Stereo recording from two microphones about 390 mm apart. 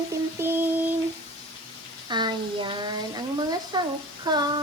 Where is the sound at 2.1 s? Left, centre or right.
Centre.